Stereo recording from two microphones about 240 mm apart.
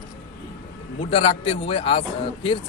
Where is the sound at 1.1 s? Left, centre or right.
Left.